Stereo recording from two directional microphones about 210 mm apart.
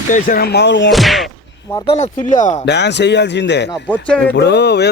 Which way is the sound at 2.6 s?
55° left (ahead or behind).